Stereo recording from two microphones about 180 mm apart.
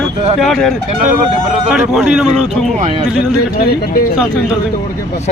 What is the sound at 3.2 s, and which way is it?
Speech, 60° left (ahead or behind).